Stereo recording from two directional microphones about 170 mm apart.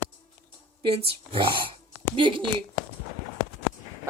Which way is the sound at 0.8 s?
35° right (ahead or behind).